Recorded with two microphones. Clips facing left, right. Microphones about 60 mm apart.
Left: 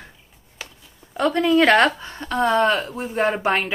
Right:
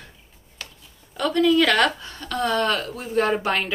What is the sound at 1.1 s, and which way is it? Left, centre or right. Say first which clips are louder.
Speech: left 1 dB; left.